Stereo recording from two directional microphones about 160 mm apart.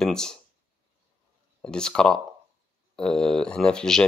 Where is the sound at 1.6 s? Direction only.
5° left (ahead or behind).